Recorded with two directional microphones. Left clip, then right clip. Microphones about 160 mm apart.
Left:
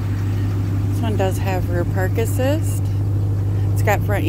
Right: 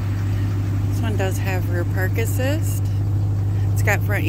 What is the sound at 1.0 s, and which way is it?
Speech, 35° left (ahead or behind).